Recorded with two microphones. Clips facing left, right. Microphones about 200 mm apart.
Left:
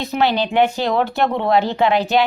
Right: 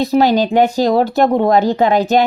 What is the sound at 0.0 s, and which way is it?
Speech, 40° right (ahead or behind).